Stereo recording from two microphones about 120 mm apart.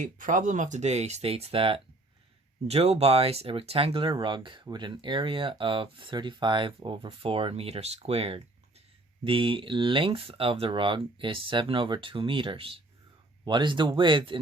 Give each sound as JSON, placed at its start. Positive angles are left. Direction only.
{"t": 0.2, "sound": "speech", "side_deg": -90}
{"t": 9.2, "sound": "speech", "side_deg": -45}